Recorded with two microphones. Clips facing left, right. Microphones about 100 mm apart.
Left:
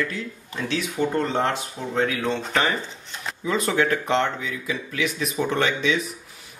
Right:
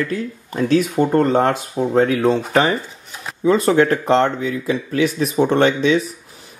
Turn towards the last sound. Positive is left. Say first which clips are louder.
# right 8 dB
turn(degrees=-35)  # may be behind; listen again after turning